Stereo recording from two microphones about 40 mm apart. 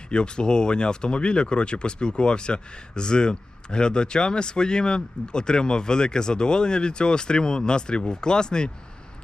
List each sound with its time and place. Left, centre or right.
0.1 s speech: left